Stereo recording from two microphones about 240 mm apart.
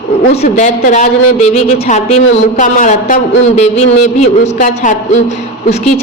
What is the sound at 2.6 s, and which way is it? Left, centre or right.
A woman's voice, left.